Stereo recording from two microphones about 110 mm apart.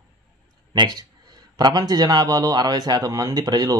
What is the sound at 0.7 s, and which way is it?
A man's voice, 40° right (ahead or behind).